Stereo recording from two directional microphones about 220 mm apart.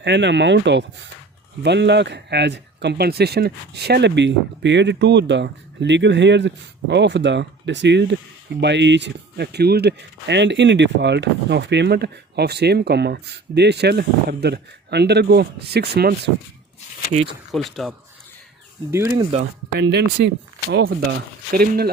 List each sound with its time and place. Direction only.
0.0 s speech: 50° right (ahead or behind)
17.5 s speech: centre (ahead or behind)
18.9 s speech: 10° right (ahead or behind)
19.8 s speech: 50° right (ahead or behind)